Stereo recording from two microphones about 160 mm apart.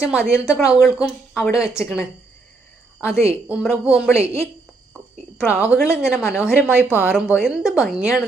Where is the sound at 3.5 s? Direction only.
5° right (ahead or behind).